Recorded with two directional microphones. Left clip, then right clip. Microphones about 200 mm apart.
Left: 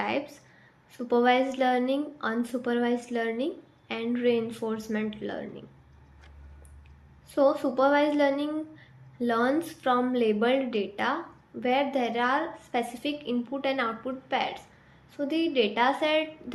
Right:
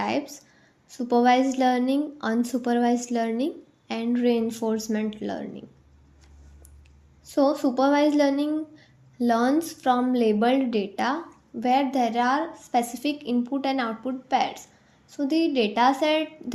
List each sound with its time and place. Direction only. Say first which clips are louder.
0.0 s speech: right 3 dB; 45° right (ahead or behind)
7.3 s speech: right 1 dB; 45° right (ahead or behind)